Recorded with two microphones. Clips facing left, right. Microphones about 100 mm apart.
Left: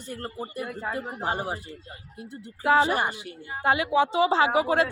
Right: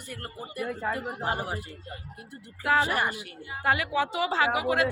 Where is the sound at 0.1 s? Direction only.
25° left (ahead or behind).